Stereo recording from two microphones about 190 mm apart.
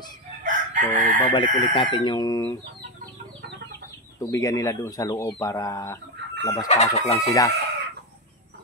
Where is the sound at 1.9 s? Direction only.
20° left (ahead or behind).